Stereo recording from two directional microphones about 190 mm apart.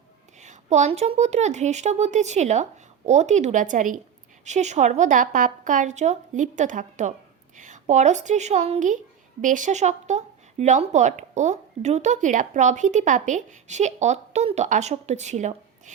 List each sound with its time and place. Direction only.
0.3 s a woman's voice: 40° right (ahead or behind)